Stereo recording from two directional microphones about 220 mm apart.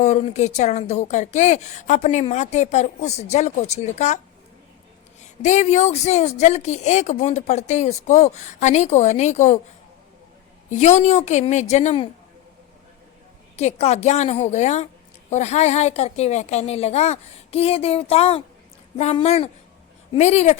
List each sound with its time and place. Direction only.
0.0 s a woman's voice: 30° left (ahead or behind)
5.2 s a woman's voice: 30° left (ahead or behind)
10.7 s a woman's voice: 30° left (ahead or behind)
13.6 s a woman's voice: 30° left (ahead or behind)